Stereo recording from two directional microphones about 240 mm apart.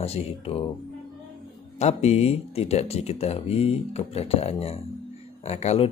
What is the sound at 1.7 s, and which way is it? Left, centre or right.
Speech, left.